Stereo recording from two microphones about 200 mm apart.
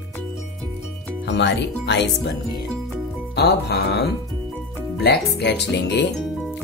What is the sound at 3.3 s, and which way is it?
Speech, 55° left (ahead or behind).